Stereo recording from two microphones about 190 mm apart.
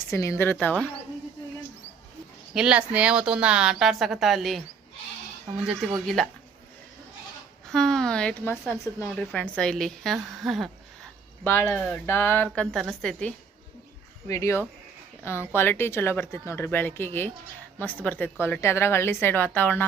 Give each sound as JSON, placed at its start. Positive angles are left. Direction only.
{"t": 0.1, "sound": "speech", "side_deg": 15}
{"t": 2.5, "sound": "speech", "side_deg": -5}
{"t": 7.7, "sound": "a woman's voice", "side_deg": 0}
{"t": 11.4, "sound": "speech", "side_deg": 10}
{"t": 12.5, "sound": "speech", "side_deg": 0}
{"t": 14.3, "sound": "speech", "side_deg": 15}